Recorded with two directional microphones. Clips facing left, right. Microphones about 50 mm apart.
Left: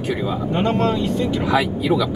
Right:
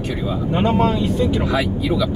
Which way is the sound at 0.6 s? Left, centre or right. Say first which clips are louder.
Right 2 dB; centre.